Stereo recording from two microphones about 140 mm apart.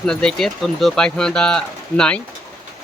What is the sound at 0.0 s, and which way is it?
Speech, 5° left (ahead or behind).